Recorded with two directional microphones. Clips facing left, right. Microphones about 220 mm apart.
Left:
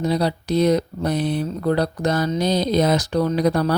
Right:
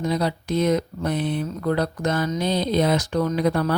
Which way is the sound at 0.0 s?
35° left (ahead or behind).